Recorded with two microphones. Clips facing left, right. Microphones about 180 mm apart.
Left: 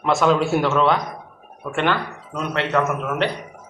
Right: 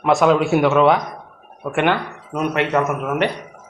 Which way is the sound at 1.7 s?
15° right (ahead or behind).